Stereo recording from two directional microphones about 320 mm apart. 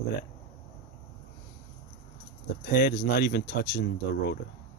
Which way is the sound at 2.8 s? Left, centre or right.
Left.